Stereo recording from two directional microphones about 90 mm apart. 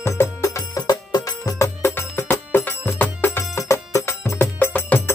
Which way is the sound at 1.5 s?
30° left (ahead or behind).